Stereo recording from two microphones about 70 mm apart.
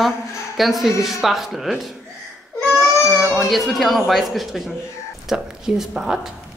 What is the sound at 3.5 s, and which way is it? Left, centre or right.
Speech, centre.